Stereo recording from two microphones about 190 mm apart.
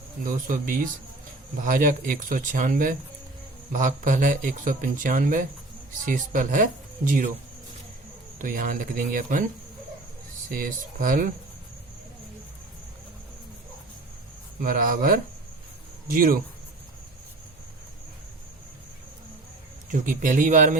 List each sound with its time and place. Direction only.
0.3 s speech: 45° right (ahead or behind)
8.4 s speech: 45° right (ahead or behind)
10.5 s speech: 45° right (ahead or behind)
14.6 s speech: 50° right (ahead or behind)
19.9 s speech: 45° right (ahead or behind)